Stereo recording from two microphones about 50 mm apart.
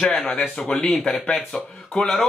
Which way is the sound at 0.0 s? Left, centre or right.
Centre.